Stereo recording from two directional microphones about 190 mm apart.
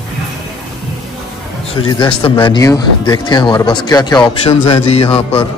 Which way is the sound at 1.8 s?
25° left (ahead or behind).